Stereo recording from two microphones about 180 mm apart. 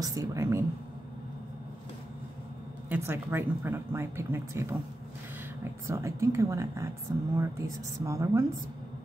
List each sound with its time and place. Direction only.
0.0 s speech: 20° right (ahead or behind)
2.9 s speech: 10° right (ahead or behind)